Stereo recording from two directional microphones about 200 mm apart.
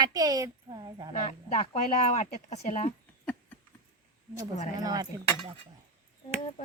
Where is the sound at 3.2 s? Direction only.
10° left (ahead or behind).